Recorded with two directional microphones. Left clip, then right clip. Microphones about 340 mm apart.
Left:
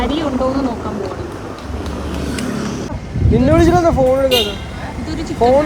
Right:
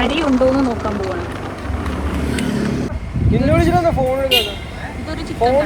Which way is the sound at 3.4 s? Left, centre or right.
Left.